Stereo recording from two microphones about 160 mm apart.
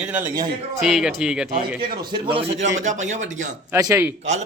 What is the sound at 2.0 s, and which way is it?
Speech, 30° right (ahead or behind).